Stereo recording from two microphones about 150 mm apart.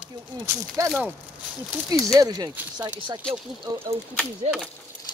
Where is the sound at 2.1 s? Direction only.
25° right (ahead or behind).